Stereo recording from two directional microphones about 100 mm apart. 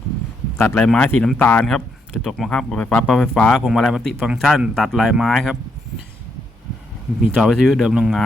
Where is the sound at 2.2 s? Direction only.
Centre (ahead or behind).